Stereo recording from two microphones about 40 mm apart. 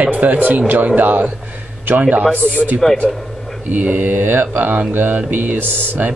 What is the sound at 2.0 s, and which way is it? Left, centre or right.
Speech, right.